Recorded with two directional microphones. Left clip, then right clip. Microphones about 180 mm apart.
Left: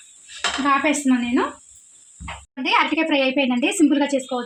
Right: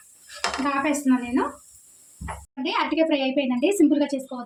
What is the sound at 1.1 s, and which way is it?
Speech, 40° left (ahead or behind).